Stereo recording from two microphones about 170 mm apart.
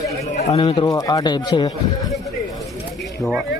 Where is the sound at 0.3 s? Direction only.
40° left (ahead or behind).